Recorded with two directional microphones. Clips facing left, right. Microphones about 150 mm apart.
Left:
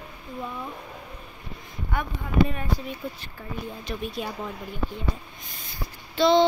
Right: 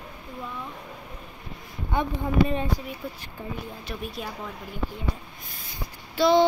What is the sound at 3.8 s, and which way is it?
Speech, centre (ahead or behind).